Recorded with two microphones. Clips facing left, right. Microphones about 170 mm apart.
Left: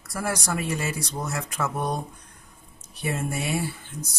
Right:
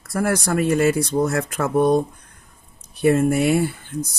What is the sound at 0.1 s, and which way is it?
Speech, 55° right (ahead or behind).